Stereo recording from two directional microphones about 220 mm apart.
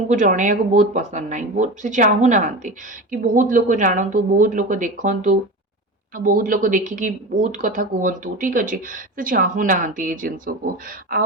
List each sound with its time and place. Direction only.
0.1 s speech: 35° right (ahead or behind)